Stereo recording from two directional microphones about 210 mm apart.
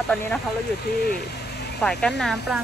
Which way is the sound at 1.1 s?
45° left (ahead or behind).